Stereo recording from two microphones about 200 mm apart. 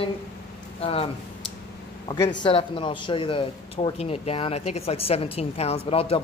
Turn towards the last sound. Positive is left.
turn(degrees=30)  # may be behind; listen again after turning